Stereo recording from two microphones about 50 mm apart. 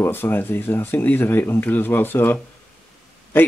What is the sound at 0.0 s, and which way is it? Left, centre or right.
Speech, left.